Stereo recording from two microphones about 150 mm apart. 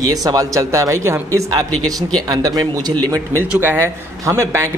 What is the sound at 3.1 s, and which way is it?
A man's voice, 15° right (ahead or behind).